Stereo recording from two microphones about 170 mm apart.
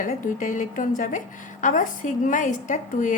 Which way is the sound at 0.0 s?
50° left (ahead or behind).